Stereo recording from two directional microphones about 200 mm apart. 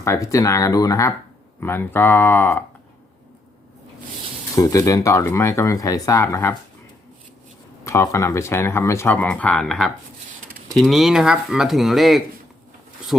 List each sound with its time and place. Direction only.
0.0 s speech: 15° left (ahead or behind)
4.5 s speech: 15° left (ahead or behind)
7.9 s speech: 15° left (ahead or behind)